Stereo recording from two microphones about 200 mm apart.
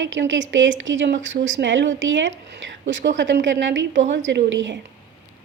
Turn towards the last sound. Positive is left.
turn(degrees=-65)  # may be behind; listen again after turning